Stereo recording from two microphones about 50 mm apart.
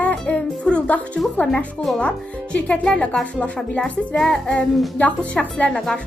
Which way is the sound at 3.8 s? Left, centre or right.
Centre.